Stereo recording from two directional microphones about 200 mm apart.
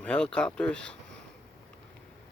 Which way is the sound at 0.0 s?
5° left (ahead or behind).